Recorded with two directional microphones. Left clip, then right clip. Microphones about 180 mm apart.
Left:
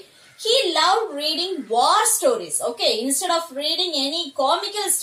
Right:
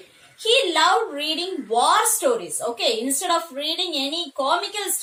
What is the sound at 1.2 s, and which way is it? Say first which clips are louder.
A woman's voice: left 2 dB; 15° right (ahead or behind).